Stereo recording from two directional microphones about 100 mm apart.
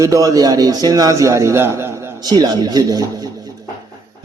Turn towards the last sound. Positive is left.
turn(degrees=-40)  # may be behind; listen again after turning